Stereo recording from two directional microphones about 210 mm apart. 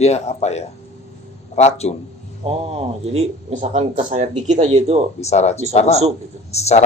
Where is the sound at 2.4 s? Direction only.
30° right (ahead or behind).